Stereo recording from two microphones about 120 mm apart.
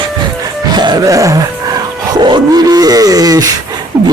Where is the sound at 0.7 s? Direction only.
35° right (ahead or behind).